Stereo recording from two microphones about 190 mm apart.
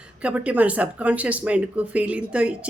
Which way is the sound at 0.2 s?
5° right (ahead or behind).